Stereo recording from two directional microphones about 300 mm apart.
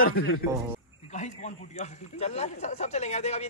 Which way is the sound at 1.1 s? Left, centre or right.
Left.